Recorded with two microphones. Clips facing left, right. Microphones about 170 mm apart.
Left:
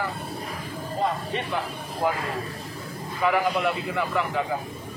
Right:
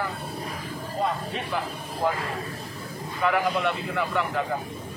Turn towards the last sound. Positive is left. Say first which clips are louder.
# left 1 dB
turn(degrees=0)  # may be behind; listen again after turning